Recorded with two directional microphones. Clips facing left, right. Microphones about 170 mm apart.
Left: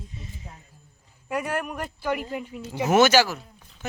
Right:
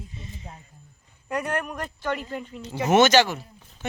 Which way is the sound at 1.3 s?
5° left (ahead or behind).